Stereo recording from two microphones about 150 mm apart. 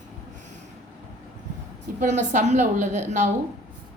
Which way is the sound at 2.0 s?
55° right (ahead or behind).